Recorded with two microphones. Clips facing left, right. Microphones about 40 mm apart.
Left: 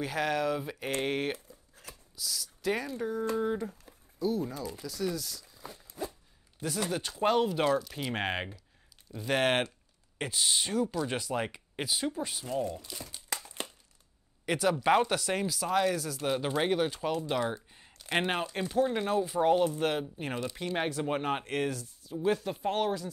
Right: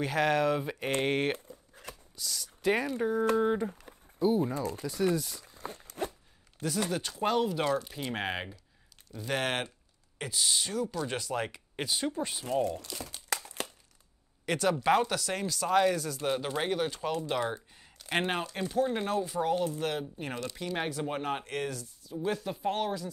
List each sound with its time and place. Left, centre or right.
0.0 s speech: centre
1.3 s a sound: right
2.1 s speech: centre; by 4.6 s right
4.6 s speech: right
5.1 s speech: centre
5.4 s a sound: right
5.9 s a sound: right
6.9 s speech: centre
14.4 s speech: centre
15.0 s speech: centre
17.7 s a sound: centre
18.1 s speech: centre
19.4 s speech: left; by 23.0 s centre